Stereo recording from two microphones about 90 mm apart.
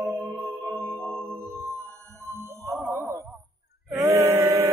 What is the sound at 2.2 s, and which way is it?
Ding, 30° right (ahead or behind).